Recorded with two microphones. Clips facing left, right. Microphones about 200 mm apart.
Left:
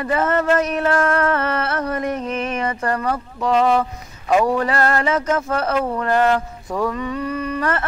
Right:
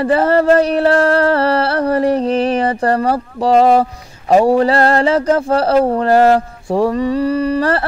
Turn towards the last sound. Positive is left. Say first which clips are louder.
# right 7 dB
turn(degrees=-35)  # may be behind; listen again after turning